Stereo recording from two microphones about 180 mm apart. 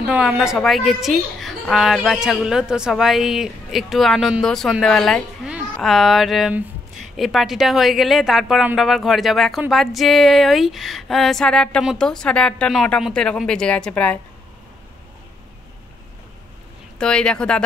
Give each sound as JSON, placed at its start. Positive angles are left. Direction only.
{"t": 0.0, "sound": "a child's voice", "side_deg": -5}
{"t": 17.0, "sound": "a child's voice", "side_deg": 5}